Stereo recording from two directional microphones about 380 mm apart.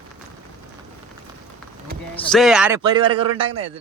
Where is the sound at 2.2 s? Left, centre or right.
Centre.